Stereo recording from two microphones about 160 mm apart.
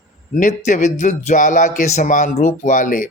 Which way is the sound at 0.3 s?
50° left (ahead or behind).